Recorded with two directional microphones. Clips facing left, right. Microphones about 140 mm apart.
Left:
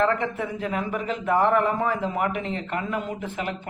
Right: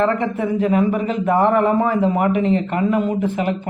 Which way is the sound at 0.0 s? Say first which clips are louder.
Right 5 dB; 10° right (ahead or behind).